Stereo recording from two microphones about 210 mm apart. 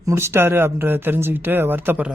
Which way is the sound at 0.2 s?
10° right (ahead or behind).